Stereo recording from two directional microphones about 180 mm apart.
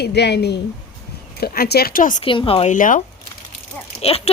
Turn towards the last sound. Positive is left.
turn(degrees=35)  # may be behind; listen again after turning